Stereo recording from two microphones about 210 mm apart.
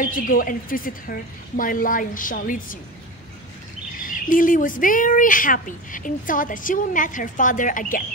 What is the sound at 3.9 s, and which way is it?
Speech, 40° left (ahead or behind).